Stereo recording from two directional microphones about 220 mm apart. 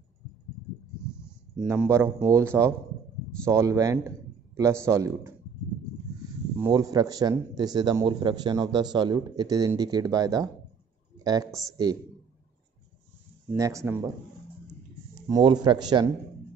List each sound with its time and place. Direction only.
1.6 s a man's voice: 5° right (ahead or behind)
3.4 s a man's voice: 15° right (ahead or behind)
6.6 s a man's voice: 15° right (ahead or behind)
13.6 s a man's voice: 15° right (ahead or behind)
15.2 s speech: 15° right (ahead or behind)